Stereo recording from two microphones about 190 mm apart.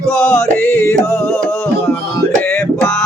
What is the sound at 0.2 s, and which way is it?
Music, 15° left (ahead or behind).